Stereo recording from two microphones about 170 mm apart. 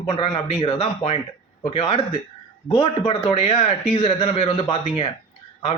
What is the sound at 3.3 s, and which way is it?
A man's voice, 40° left (ahead or behind).